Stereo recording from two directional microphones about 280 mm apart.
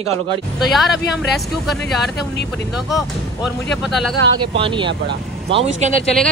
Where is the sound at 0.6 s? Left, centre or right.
Centre.